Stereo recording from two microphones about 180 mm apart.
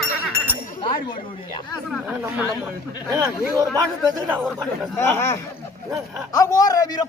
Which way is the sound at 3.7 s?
20° right (ahead or behind).